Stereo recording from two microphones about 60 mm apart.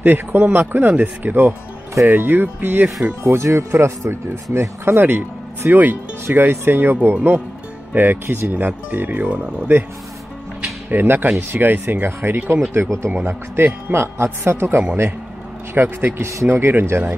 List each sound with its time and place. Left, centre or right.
0.0 s speech: right
3.3 s speech: right; by 9.7 s centre
10.9 s speech: right
13.3 s speech: right